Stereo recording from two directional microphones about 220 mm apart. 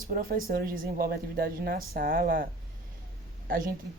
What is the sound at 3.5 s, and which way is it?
Speech, 40° right (ahead or behind).